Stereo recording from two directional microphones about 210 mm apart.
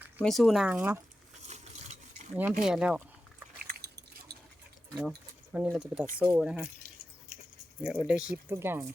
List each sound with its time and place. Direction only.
0.2 s speech: centre (ahead or behind)
2.3 s speech: 5° right (ahead or behind)
3.6 s a sound: 45° right (ahead or behind)
4.9 s speech: 5° right (ahead or behind)
7.3 s a sound: 40° right (ahead or behind)
7.9 s speech: 5° right (ahead or behind)